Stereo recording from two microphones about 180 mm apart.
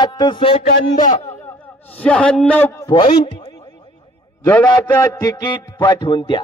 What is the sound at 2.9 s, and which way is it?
Speech, 30° left (ahead or behind).